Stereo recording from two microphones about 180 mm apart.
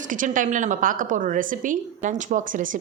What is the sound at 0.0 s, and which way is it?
A woman's voice, 45° right (ahead or behind).